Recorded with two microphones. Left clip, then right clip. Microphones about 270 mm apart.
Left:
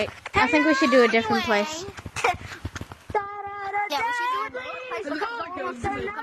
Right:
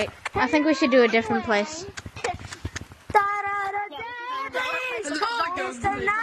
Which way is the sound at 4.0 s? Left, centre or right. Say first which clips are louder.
Left 9 dB; left.